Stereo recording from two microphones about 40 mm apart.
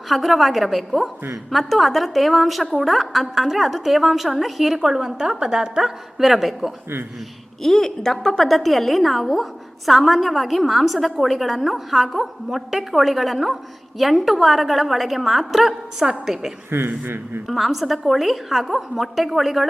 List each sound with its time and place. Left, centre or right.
0.1 s a woman's voice: centre
4.7 s a woman's voice: centre
7.6 s a woman's voice: centre
16.7 s a man's voice: right
17.5 s a woman's voice: centre